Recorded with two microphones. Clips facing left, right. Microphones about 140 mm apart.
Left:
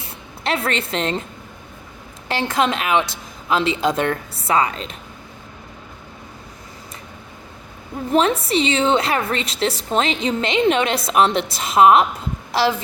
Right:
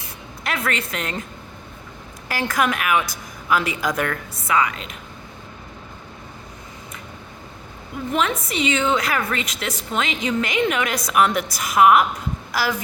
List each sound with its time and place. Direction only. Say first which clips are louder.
0.4 s a woman's voice: left 3 dB; 30° left (ahead or behind)
2.3 s a woman's voice: left 2 dB; 25° left (ahead or behind)
8.1 s a woman's voice: left 6 dB; 30° left (ahead or behind)